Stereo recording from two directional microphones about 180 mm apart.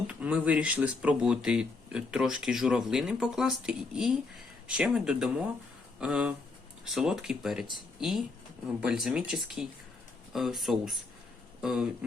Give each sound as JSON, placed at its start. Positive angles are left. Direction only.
{"t": 0.1, "sound": "speech", "side_deg": -5}